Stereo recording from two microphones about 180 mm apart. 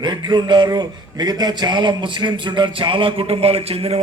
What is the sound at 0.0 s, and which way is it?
A man's voice, 25° right (ahead or behind).